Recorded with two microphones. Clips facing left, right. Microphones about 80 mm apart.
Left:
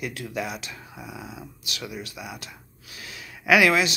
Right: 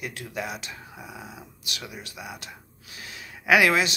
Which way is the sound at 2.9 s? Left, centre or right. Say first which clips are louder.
Even; right.